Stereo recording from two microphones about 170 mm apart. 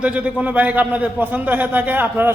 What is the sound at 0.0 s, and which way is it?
A man's voice, 5° right (ahead or behind).